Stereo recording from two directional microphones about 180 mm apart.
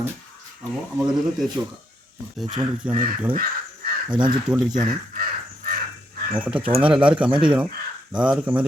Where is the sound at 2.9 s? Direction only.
50° right (ahead or behind).